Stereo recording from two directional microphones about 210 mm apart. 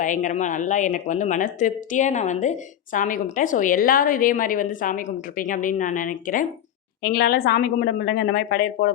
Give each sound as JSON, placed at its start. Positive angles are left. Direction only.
{"t": 0.0, "sound": "a woman's voice", "side_deg": 35}